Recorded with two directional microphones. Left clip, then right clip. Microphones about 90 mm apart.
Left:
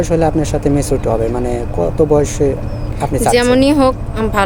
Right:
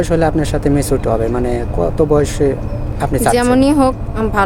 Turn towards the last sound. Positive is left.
turn(degrees=-30)  # may be behind; listen again after turning